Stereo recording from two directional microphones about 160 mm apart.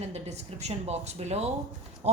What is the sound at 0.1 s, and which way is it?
A woman's voice, 45° right (ahead or behind).